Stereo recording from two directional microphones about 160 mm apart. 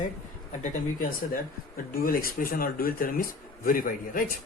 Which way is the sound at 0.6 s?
60° left (ahead or behind).